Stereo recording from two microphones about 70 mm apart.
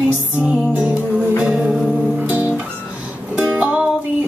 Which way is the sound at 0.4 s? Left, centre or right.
Centre.